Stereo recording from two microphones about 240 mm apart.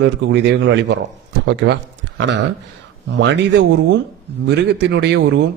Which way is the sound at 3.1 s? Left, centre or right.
Right.